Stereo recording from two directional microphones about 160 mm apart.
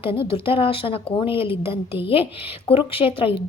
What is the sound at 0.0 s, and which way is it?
A woman's voice, 35° left (ahead or behind).